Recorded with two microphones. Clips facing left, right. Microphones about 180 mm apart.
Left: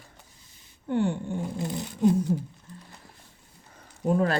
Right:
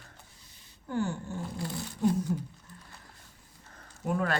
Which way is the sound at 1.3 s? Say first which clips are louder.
Left 5 dB; 20° left (ahead or behind).